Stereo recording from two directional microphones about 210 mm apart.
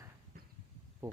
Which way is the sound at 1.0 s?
15° right (ahead or behind).